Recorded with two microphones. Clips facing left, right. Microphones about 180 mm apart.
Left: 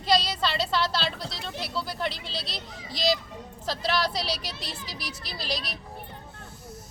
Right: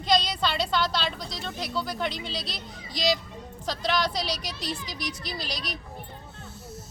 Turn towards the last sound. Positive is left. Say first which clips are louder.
# left 1 dB
turn(degrees=0)  # may be behind; listen again after turning